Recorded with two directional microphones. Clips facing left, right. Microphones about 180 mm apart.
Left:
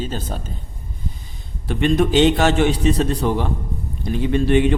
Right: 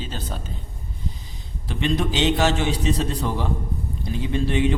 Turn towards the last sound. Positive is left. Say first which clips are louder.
# left 5 dB
turn(degrees=60)  # may be behind; listen again after turning